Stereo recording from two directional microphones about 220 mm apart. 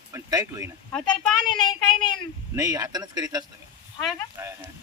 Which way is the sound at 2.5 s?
15° right (ahead or behind).